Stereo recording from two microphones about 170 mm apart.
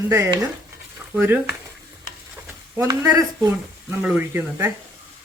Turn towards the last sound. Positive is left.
turn(degrees=-10)  # may be behind; listen again after turning